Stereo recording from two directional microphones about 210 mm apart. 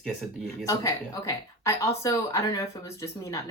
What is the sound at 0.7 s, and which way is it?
A woman's voice, 15° left (ahead or behind).